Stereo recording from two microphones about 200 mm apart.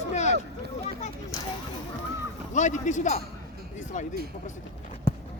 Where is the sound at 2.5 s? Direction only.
35° left (ahead or behind).